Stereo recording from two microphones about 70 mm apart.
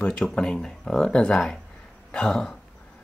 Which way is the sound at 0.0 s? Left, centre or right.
Centre.